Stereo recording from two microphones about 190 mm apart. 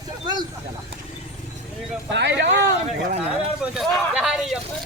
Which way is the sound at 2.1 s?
65° right (ahead or behind).